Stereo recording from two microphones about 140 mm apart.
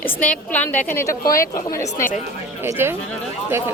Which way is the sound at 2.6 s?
15° right (ahead or behind).